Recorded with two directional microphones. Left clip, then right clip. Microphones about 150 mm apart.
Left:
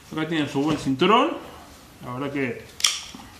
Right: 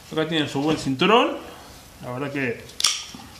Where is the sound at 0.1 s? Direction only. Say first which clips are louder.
Right 2 dB; 40° right (ahead or behind).